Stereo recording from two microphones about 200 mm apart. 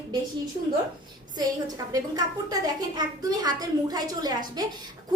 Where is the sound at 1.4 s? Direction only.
20° right (ahead or behind).